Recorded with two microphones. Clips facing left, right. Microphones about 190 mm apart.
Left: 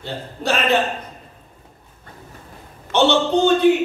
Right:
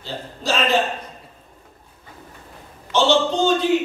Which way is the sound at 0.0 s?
60° left (ahead or behind).